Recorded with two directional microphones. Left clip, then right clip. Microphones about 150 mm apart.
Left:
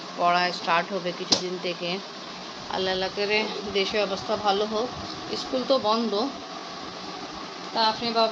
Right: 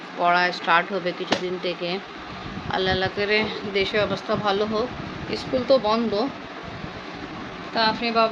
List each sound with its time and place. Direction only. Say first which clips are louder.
0.2 s speech: right 3 dB; 25° right (ahead or behind)
7.8 s speech: right 2 dB; 25° right (ahead or behind)